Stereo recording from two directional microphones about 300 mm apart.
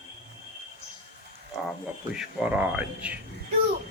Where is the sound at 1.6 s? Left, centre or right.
Centre.